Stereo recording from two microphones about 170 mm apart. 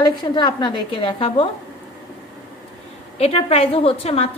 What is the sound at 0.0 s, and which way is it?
A woman's voice, 25° left (ahead or behind).